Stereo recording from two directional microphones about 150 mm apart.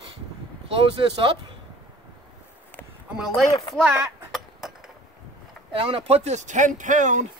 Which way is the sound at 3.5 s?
25° left (ahead or behind).